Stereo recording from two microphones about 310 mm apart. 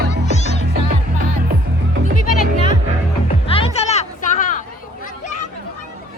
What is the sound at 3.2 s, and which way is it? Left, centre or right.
Music, centre.